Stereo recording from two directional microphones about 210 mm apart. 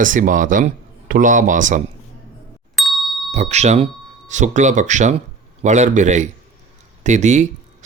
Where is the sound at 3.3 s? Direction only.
30° right (ahead or behind).